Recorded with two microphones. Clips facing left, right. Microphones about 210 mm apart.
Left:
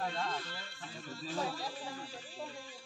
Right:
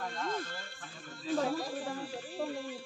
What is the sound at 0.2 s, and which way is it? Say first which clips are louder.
Music: right 3 dB; 45° right (ahead or behind).